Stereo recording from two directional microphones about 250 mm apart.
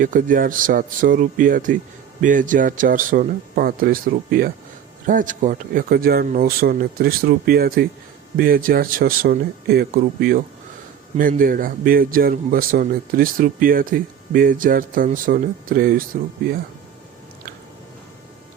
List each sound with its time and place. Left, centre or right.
0.0 s speech: right